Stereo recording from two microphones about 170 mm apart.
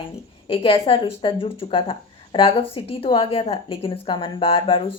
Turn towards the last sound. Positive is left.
turn(degrees=35)  # may be behind; listen again after turning